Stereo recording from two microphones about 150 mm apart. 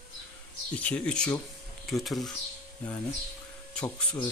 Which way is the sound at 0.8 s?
5° left (ahead or behind).